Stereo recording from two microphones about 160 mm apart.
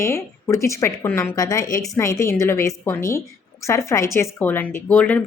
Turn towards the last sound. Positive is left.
turn(degrees=10)  # may be behind; listen again after turning